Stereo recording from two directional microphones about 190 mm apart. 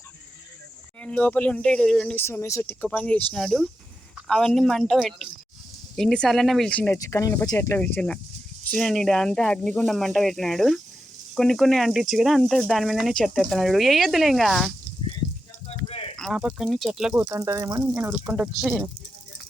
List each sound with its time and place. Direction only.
1.0 s speech: 5° left (ahead or behind)
15.9 s a sound: 30° left (ahead or behind)
16.1 s speech: centre (ahead or behind)
17.2 s speech: 15° right (ahead or behind)